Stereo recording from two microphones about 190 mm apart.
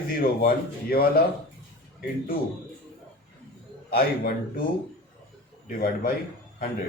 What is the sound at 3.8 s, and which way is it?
Speech, 50° left (ahead or behind).